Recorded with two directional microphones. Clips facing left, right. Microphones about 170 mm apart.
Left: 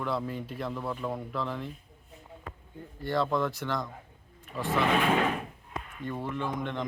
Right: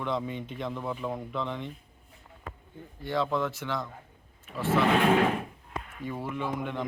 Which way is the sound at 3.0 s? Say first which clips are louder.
Left 1 dB; 10° right (ahead or behind).